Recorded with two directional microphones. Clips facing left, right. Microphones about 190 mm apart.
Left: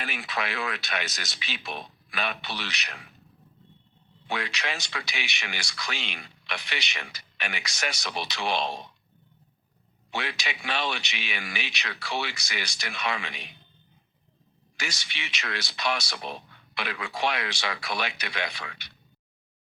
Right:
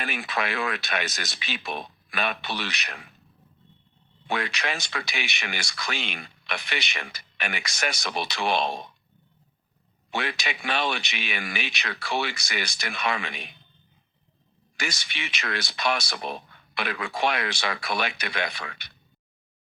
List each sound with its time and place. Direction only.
0.0 s speech: 50° right (ahead or behind)
4.3 s speech: 50° right (ahead or behind)
10.1 s speech: 50° right (ahead or behind)
14.8 s speech: 50° right (ahead or behind)